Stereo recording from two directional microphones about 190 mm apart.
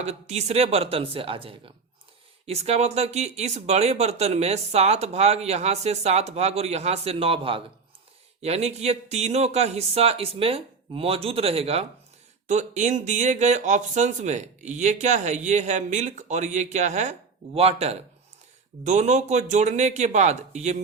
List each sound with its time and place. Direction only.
0.0 s speech: 35° right (ahead or behind)